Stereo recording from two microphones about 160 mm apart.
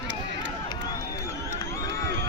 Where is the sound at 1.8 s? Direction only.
90° right.